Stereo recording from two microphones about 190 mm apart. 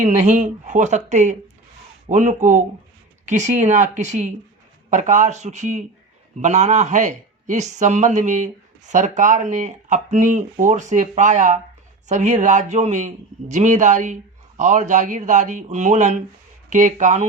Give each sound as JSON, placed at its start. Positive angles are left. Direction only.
{"t": 0.0, "sound": "speech", "side_deg": -40}